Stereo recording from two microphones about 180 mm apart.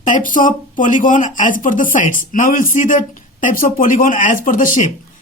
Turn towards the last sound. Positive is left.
turn(degrees=50)  # may be behind; listen again after turning